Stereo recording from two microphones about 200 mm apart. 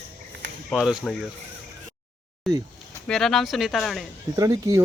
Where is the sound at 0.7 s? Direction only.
Centre (ahead or behind).